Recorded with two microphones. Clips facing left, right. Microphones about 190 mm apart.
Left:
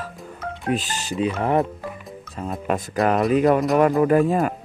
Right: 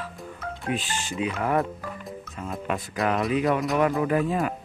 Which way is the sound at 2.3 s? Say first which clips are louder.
Left 5 dB; 40° left (ahead or behind).